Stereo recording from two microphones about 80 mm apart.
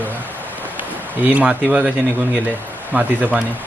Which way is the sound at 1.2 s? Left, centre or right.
Centre.